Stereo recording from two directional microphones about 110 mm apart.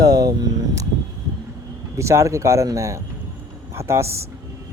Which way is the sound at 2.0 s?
25° right (ahead or behind).